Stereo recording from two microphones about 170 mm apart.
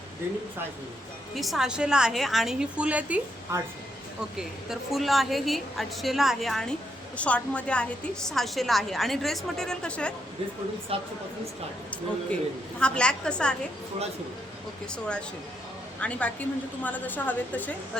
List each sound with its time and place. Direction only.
1.4 s a woman's voice: centre (ahead or behind)
10.9 s speech: 35° right (ahead or behind)
12.3 s a woman's voice: 5° left (ahead or behind)
14.9 s a woman's voice: 5° left (ahead or behind)